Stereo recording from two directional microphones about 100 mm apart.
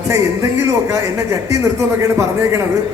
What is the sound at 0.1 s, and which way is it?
Speech, 30° right (ahead or behind).